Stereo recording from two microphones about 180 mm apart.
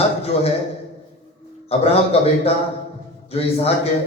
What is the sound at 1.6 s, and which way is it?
A man's voice, 35° left (ahead or behind).